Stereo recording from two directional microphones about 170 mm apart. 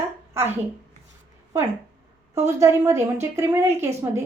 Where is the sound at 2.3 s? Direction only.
15° right (ahead or behind).